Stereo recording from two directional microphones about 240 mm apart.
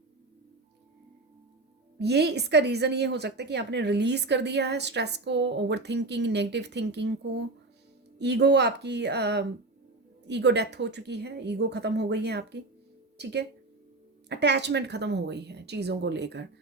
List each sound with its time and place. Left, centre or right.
2.0 s speech: right
8.2 s speech: right